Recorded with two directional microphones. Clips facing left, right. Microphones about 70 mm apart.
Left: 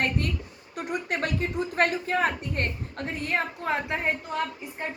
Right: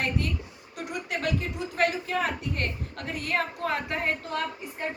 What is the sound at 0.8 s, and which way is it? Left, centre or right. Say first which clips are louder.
A woman's voice: left 3 dB; left.